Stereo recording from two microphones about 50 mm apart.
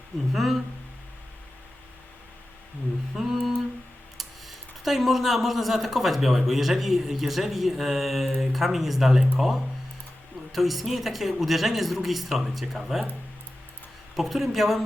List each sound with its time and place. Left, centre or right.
0.3 s speech: centre
3.2 s humming: centre
4.2 s speech: centre
14.2 s speech: centre